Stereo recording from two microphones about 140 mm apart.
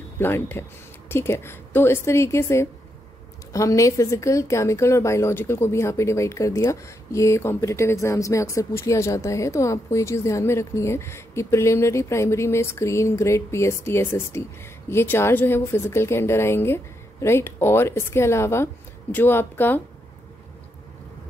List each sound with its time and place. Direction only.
0.2 s speech: 15° left (ahead or behind)